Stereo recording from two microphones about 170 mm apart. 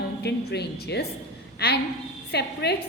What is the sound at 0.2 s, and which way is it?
A woman's voice, 75° left (ahead or behind).